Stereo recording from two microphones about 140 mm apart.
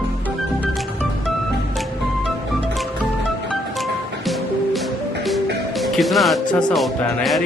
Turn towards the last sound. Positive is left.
turn(degrees=0)  # may be behind; listen again after turning